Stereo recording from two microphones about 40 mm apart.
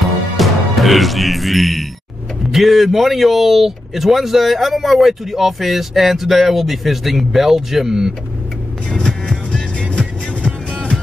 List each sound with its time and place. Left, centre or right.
0.0 s music: centre
2.5 s speech: centre
9.5 s music: left